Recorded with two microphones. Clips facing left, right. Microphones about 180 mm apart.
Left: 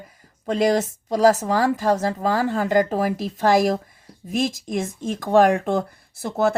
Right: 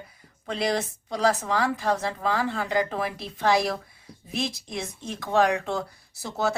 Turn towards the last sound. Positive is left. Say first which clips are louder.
# left 6 dB
turn(degrees=55)  # may be behind; listen again after turning